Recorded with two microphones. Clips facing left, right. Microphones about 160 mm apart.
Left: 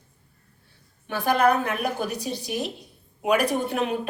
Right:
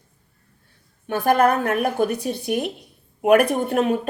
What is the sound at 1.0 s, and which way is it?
A woman's voice, 50° right (ahead or behind).